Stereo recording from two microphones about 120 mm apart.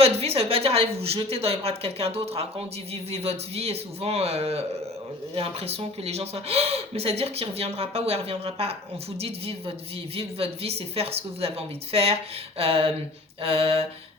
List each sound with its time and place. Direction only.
0.0 s a woman's voice: 55° right (ahead or behind)